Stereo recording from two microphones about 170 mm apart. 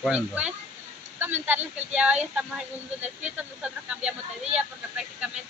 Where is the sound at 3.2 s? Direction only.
5° right (ahead or behind).